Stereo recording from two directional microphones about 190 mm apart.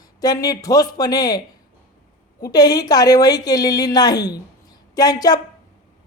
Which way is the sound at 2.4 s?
20° left (ahead or behind).